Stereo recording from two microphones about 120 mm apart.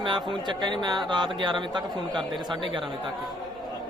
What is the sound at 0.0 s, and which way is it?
Speech, 40° right (ahead or behind).